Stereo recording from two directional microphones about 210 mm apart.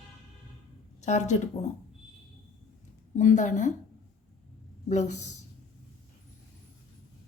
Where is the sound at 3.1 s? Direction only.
35° left (ahead or behind).